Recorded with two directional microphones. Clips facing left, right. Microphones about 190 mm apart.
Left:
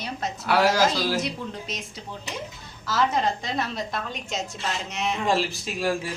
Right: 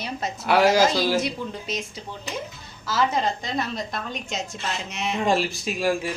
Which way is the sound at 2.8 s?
5° right (ahead or behind).